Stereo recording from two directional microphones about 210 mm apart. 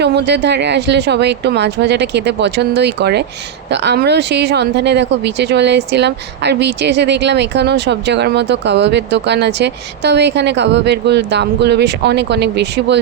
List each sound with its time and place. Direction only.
0.0 s speech: 50° right (ahead or behind)